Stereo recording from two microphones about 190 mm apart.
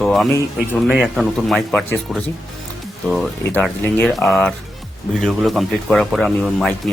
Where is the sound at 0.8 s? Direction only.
5° right (ahead or behind).